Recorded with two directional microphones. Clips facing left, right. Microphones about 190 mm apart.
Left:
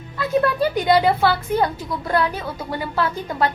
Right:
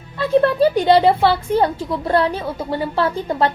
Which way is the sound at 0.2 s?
30° right (ahead or behind).